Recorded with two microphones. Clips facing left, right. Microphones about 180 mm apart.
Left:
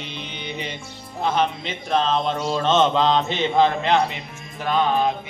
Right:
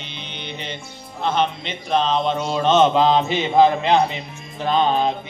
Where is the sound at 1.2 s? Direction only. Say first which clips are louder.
Right 1 dB; 5° left (ahead or behind); by 5.1 s 25° right (ahead or behind).